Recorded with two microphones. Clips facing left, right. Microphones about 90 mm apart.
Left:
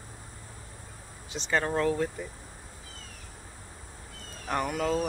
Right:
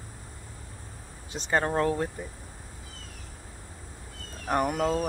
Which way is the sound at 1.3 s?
35° right (ahead or behind).